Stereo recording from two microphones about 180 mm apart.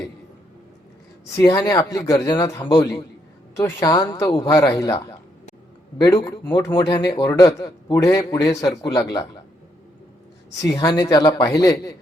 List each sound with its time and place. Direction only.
1.5 s a man's voice: 20° left (ahead or behind)
10.6 s a man's voice: 20° left (ahead or behind)